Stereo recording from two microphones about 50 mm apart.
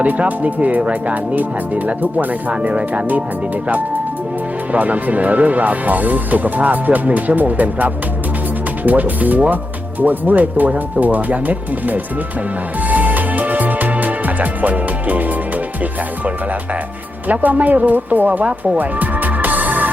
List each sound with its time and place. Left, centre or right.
0.0 s speech: right
12.8 s music: right
17.2 s speech: right
18.8 s music: right